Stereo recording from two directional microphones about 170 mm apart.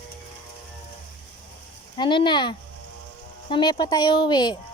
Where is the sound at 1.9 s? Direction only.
30° left (ahead or behind).